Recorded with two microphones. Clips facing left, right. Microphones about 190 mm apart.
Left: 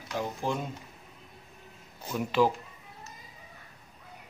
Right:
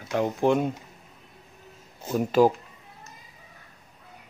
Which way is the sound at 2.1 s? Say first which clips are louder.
Right 6 dB; 45° right (ahead or behind).